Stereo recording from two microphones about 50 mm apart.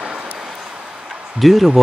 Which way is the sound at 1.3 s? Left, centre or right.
Centre.